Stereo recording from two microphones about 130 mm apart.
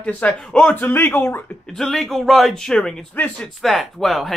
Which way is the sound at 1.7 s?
5° left (ahead or behind).